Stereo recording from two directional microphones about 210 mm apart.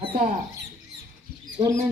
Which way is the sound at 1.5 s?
15° right (ahead or behind).